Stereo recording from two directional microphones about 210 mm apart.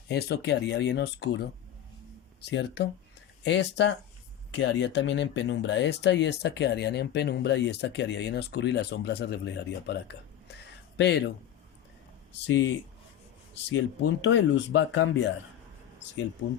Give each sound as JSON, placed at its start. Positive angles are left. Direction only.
{"t": 0.1, "sound": "speech", "side_deg": 50}
{"t": 10.5, "sound": "a sound", "side_deg": 55}
{"t": 12.3, "sound": "speech", "side_deg": 60}